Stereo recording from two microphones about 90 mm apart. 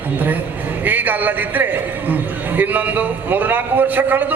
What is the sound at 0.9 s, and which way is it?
A man's voice, 20° right (ahead or behind).